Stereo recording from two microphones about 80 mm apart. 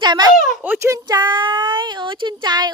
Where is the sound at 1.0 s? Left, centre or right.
Right.